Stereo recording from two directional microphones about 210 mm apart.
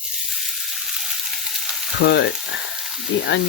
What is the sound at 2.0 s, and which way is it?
Speech, 50° left (ahead or behind).